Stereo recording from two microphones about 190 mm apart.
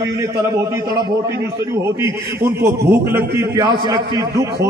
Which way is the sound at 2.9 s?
15° right (ahead or behind).